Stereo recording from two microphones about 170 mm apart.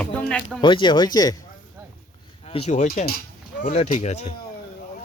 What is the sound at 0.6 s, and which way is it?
Speech, 25° left (ahead or behind).